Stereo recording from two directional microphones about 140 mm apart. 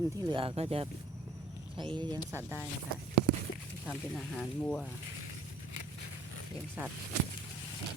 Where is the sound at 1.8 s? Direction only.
35° right (ahead or behind).